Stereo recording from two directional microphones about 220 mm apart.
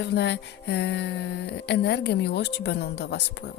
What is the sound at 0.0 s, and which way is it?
Speech, 50° left (ahead or behind).